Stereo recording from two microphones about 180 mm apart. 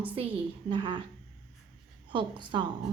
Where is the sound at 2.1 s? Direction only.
25° right (ahead or behind).